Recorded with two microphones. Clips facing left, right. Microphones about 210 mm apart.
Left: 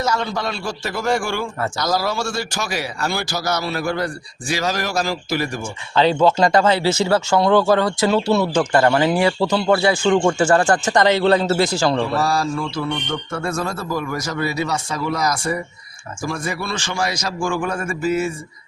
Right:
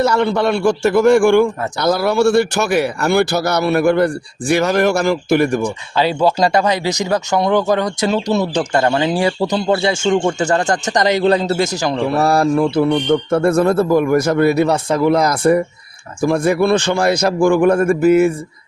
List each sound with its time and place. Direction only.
0.0 s a man's voice: 60° right (ahead or behind)
6.0 s speech: 10° right (ahead or behind)
12.1 s a man's voice: 60° right (ahead or behind)